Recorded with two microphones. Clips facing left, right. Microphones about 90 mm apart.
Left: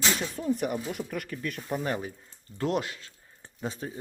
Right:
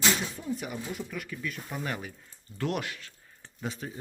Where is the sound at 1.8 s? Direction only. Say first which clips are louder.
Left 4 dB; 30° left (ahead or behind).